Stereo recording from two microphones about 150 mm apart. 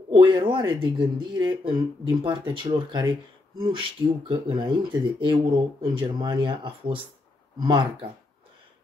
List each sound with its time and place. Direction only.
0.1 s speech: 35° right (ahead or behind)